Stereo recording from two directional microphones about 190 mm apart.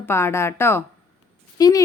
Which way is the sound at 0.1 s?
15° left (ahead or behind).